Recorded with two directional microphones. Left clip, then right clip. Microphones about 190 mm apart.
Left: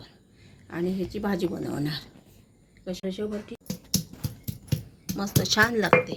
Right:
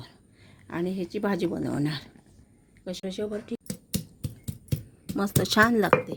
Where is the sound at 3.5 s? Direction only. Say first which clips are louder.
Right 6 dB; 55° right (ahead or behind).